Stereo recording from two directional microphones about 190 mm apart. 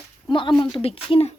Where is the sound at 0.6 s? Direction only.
30° left (ahead or behind).